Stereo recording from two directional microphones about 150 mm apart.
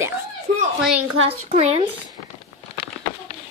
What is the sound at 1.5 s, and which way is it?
Speech, 45° right (ahead or behind).